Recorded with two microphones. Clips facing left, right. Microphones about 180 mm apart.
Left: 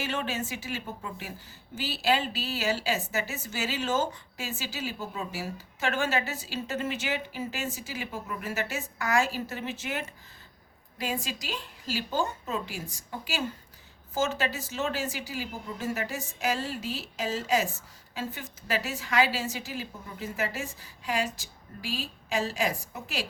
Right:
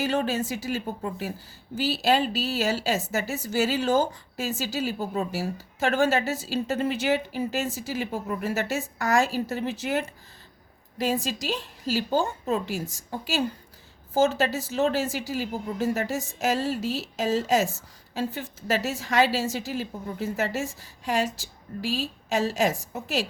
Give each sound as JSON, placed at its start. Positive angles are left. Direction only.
{"t": 0.0, "sound": "a woman's voice", "side_deg": -40}